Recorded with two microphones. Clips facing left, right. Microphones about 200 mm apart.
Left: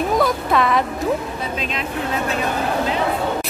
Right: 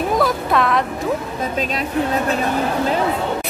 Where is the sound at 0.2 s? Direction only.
Centre (ahead or behind).